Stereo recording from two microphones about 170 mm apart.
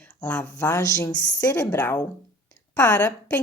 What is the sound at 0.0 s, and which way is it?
Speech, 5° left (ahead or behind).